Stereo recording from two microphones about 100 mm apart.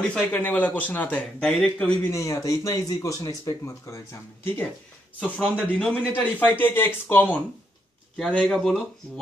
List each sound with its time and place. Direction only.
0.1 s speech: 15° left (ahead or behind)
2.0 s speech: 30° left (ahead or behind)
5.4 s speech: 10° left (ahead or behind)